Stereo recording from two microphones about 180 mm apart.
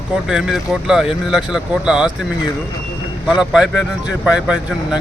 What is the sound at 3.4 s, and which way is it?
A man's voice, 5° right (ahead or behind).